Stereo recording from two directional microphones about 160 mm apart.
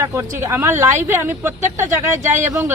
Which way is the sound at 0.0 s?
15° right (ahead or behind).